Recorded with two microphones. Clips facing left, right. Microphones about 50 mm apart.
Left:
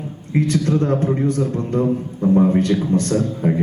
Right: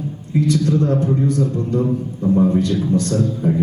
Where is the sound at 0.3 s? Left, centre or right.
Left.